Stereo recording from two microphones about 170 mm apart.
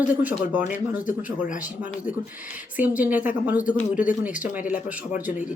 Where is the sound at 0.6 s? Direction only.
45° left (ahead or behind).